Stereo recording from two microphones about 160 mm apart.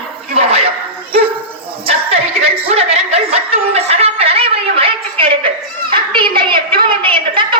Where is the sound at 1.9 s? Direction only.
40° right (ahead or behind).